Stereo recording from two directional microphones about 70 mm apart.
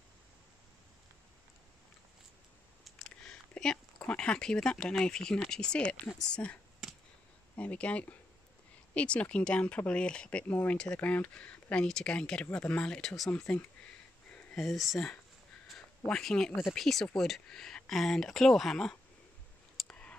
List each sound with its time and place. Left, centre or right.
3.3 s speech: centre
10.5 s speech: left; by 13.3 s centre
13.4 s speech: centre
14.3 s a sound: centre
14.7 s speech: centre
19.9 s a sound: centre